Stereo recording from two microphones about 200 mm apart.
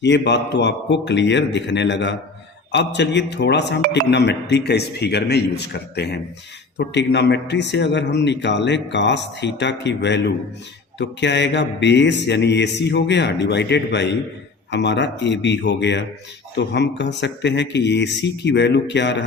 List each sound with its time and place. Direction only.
0.0 s a man's voice: 60° left (ahead or behind)